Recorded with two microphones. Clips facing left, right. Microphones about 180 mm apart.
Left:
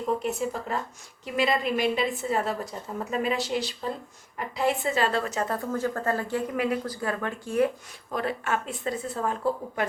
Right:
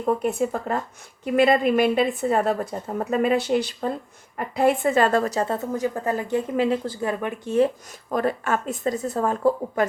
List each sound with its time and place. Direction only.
0.0 s a woman's voice: 55° right (ahead or behind); by 7.7 s 25° right (ahead or behind)
8.1 s speech: 45° right (ahead or behind)